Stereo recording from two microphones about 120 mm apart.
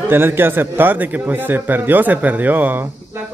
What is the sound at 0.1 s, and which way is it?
Speech, 20° right (ahead or behind).